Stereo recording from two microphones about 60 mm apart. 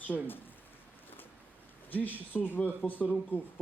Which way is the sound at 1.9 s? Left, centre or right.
Left.